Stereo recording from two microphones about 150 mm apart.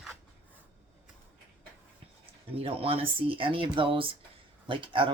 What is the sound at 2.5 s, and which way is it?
Speech, 40° right (ahead or behind).